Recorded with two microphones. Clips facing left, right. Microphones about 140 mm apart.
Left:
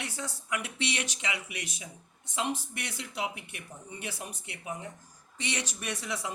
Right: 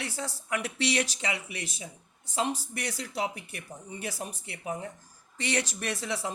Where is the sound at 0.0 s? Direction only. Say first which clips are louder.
Right 2 dB; 35° right (ahead or behind).